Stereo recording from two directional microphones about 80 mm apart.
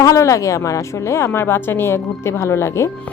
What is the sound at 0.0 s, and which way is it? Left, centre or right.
A woman's voice, left.